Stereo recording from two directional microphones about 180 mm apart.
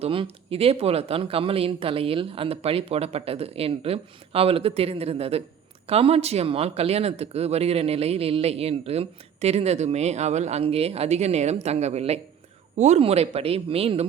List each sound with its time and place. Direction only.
0.0 s speech: 30° right (ahead or behind)